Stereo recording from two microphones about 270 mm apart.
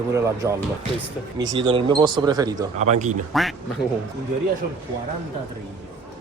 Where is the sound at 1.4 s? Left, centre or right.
Centre.